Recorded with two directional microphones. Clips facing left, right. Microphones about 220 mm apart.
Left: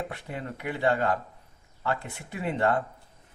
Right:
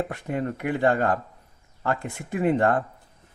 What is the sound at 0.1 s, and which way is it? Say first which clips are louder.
Speech: right 8 dB; 50° right (ahead or behind).